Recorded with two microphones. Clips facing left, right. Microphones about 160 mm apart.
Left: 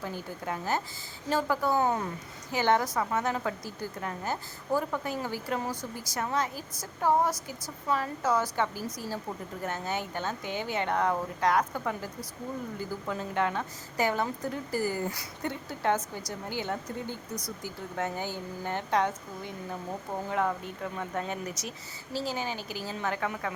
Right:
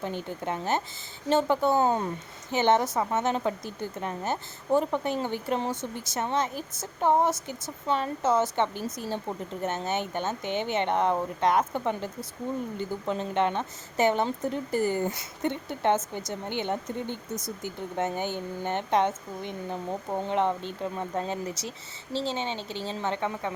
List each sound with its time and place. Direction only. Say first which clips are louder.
0.0 s a woman's voice: right 4 dB; 25° right (ahead or behind)